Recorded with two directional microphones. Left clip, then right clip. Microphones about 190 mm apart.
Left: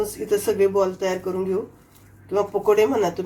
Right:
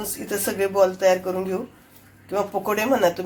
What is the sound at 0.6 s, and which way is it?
Speech, 15° right (ahead or behind).